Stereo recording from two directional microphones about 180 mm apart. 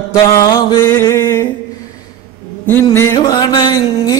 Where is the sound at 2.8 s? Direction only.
15° left (ahead or behind).